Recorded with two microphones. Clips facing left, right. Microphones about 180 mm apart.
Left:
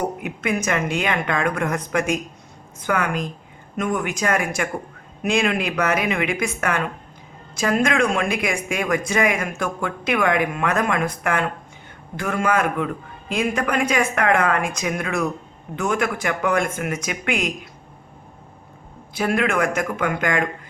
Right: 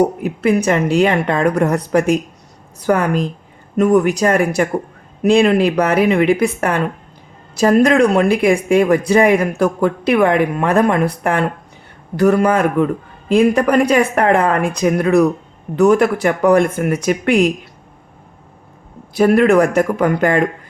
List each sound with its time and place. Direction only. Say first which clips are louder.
0.0 s speech: right 10 dB; 35° right (ahead or behind)
19.1 s speech: right 10 dB; 40° right (ahead or behind)